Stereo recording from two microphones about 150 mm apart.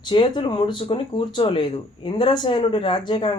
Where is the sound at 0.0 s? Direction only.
30° left (ahead or behind).